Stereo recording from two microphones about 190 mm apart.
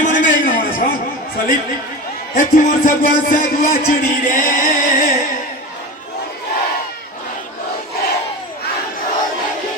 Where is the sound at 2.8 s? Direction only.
45° left (ahead or behind).